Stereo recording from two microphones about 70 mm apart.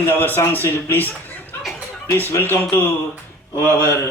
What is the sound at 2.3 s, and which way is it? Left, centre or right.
Speech, left.